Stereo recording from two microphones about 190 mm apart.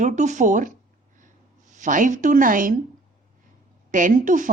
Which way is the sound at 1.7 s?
40° right (ahead or behind).